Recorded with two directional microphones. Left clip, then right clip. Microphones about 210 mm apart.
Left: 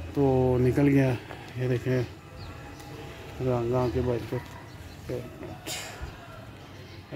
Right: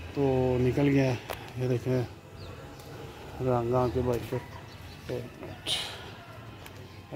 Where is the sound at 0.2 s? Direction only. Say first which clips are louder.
Left 3 dB; 10° left (ahead or behind).